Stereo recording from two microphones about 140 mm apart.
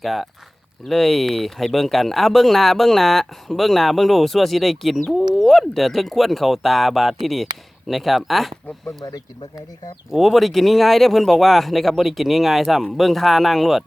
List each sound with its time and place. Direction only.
0.0 s speech: centre (ahead or behind)
9.1 s speech: 25° left (ahead or behind)
10.1 s speech: centre (ahead or behind)